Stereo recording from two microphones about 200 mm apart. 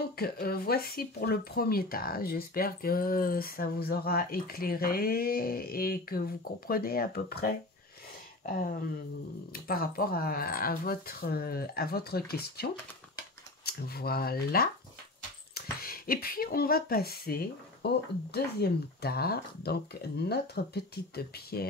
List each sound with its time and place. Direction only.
0.2 s speech: 50° left (ahead or behind)
9.5 s speech: 50° left (ahead or behind)